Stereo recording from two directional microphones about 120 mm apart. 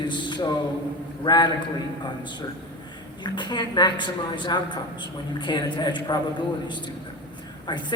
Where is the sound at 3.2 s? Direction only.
40° left (ahead or behind).